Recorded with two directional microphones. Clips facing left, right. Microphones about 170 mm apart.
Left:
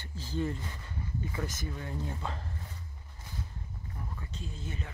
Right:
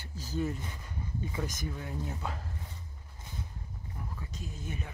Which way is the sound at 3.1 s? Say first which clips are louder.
Even; 20° right (ahead or behind).